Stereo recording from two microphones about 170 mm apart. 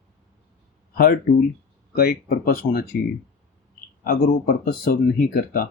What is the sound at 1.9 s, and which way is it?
Speech, 65° left (ahead or behind).